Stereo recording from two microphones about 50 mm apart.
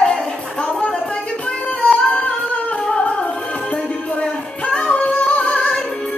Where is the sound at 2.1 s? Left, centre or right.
Left.